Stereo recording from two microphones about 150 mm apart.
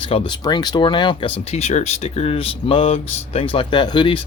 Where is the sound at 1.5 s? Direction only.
45° left (ahead or behind).